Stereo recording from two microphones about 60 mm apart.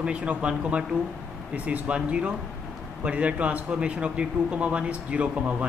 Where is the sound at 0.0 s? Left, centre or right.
Centre.